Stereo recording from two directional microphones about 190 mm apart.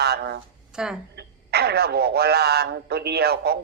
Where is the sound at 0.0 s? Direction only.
60° right (ahead or behind).